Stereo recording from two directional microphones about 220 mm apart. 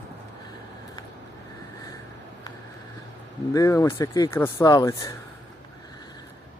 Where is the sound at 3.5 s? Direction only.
15° left (ahead or behind).